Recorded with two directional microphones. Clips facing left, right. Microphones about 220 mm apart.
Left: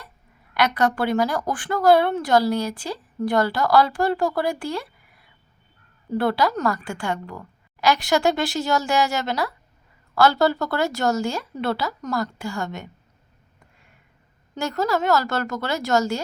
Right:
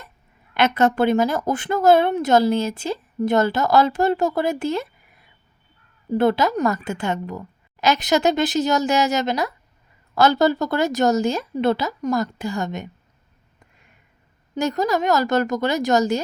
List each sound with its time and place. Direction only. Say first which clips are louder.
0.5 s speech: right 3 dB; 25° right (ahead or behind)
14.5 s a woman's voice: right 3 dB; 15° right (ahead or behind)